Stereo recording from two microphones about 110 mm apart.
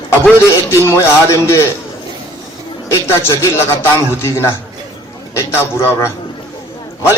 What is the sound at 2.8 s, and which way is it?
Speech, 25° left (ahead or behind).